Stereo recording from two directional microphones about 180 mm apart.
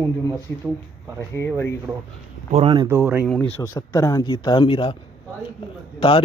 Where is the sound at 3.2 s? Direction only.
10° left (ahead or behind); by 4.9 s 30° left (ahead or behind).